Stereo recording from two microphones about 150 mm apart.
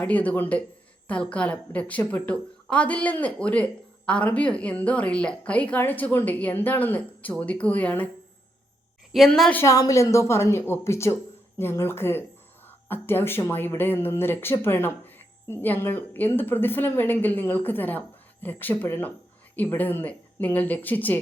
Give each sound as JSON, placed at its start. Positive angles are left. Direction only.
{"t": 0.0, "sound": "a woman's voice", "side_deg": 10}
{"t": 9.1, "sound": "a woman's voice", "side_deg": 0}
{"t": 9.6, "sound": "a woman's voice", "side_deg": 20}